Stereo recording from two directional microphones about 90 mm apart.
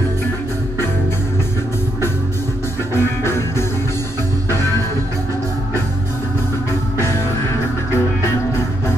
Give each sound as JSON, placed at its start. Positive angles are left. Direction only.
{"t": 2.9, "sound": "music", "side_deg": 30}